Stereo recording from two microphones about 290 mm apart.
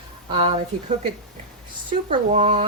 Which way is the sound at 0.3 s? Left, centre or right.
Centre.